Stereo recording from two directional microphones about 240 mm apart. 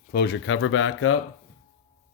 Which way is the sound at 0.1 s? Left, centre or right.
Left.